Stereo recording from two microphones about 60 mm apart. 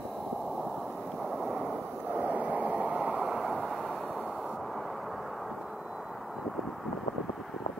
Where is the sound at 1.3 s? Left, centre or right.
Centre.